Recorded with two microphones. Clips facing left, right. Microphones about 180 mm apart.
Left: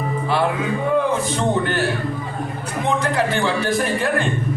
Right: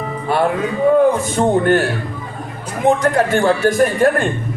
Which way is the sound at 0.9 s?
45° right (ahead or behind).